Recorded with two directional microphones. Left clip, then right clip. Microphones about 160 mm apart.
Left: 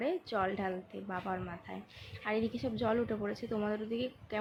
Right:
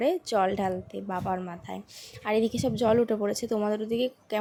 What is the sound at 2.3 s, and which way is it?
A woman's voice, 60° right (ahead or behind).